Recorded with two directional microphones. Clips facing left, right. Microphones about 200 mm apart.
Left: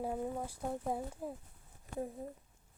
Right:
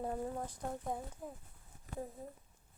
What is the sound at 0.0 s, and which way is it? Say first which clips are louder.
Speech: left 1 dB; 5° left (ahead or behind).